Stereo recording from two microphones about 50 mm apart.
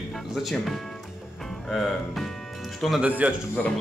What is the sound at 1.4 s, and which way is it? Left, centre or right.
Music, centre.